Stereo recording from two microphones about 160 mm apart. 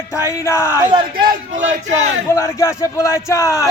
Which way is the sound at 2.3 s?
20° left (ahead or behind).